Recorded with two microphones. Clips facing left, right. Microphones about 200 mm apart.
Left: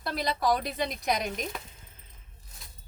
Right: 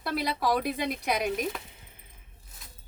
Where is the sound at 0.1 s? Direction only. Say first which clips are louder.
Even; 10° right (ahead or behind).